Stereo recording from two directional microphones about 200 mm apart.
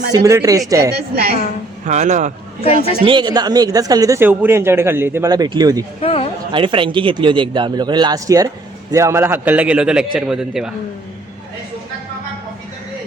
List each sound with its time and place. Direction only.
0.1 s a man's voice: 15° right (ahead or behind)
1.1 s a woman's voice: 50° right (ahead or behind)
1.8 s speech: 35° right (ahead or behind)
3.0 s a man's voice: 25° right (ahead or behind)
6.0 s speech: 30° left (ahead or behind)
6.5 s a man's voice: 25° right (ahead or behind); by 10.7 s 5° right (ahead or behind)